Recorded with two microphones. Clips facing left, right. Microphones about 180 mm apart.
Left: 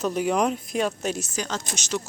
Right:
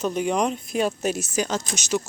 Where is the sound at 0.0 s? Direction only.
Centre (ahead or behind).